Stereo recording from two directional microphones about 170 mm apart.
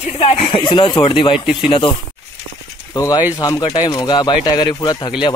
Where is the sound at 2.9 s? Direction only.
20° left (ahead or behind).